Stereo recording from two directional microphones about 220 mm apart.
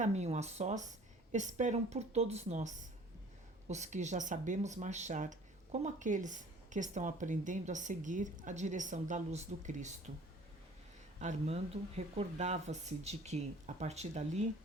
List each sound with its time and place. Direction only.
0.0 s speech: 30° right (ahead or behind)
11.2 s speech: 30° right (ahead or behind)